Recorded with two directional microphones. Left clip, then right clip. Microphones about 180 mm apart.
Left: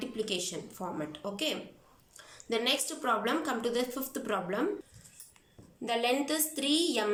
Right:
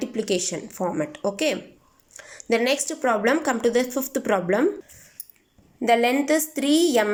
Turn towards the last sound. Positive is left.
turn(degrees=-40)  # may be behind; listen again after turning